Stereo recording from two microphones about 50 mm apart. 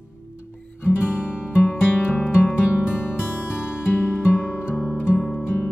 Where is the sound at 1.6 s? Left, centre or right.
Left.